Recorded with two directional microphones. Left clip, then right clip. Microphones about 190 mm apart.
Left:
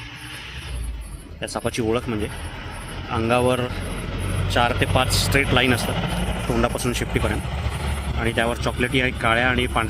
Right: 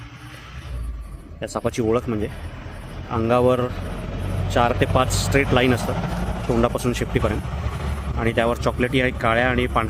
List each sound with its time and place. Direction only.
1.4 s speech: 30° right (ahead or behind)
6.0 s vehicle: 10° left (ahead or behind)
6.6 s speech: 35° right (ahead or behind)